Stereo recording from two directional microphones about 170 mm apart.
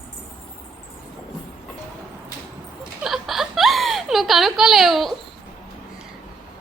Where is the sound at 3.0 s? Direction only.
Centre (ahead or behind).